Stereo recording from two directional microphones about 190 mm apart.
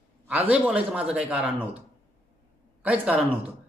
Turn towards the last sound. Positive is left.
turn(degrees=-5)  # may be behind; listen again after turning